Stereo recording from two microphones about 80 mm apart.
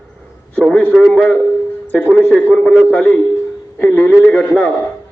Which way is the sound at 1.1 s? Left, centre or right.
Centre.